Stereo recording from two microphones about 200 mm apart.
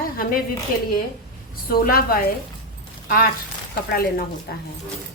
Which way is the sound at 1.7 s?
50° left (ahead or behind).